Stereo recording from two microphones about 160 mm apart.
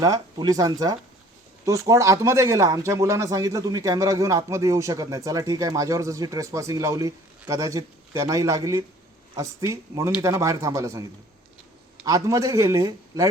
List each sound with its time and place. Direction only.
0.0 s speech: 20° right (ahead or behind)
12.0 s speech: 20° right (ahead or behind)